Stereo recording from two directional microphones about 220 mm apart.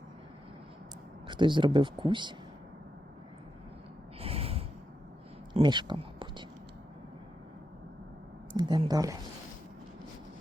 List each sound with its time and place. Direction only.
1.3 s speech: 20° right (ahead or behind)
4.2 s snort: 25° right (ahead or behind)
5.5 s speech: 20° right (ahead or behind)
8.5 s speech: 20° right (ahead or behind)